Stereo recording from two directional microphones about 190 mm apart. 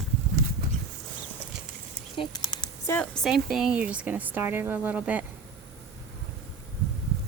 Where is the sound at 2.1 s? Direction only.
25° left (ahead or behind).